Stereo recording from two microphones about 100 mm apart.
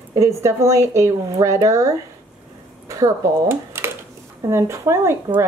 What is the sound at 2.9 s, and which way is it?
Speech, 30° right (ahead or behind).